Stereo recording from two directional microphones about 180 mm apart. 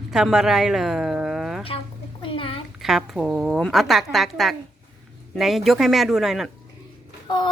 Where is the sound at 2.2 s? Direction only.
30° left (ahead or behind).